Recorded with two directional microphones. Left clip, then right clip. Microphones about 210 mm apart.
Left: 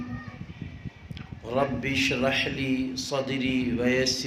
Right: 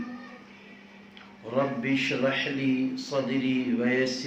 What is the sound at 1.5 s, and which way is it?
A man's voice, 45° left (ahead or behind).